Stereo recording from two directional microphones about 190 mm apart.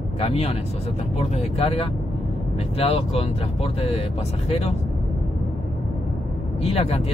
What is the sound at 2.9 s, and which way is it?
Speech, 30° left (ahead or behind).